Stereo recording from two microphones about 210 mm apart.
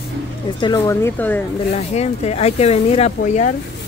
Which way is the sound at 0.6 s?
15° left (ahead or behind).